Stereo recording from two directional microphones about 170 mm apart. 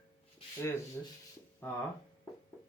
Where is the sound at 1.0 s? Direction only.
10° left (ahead or behind).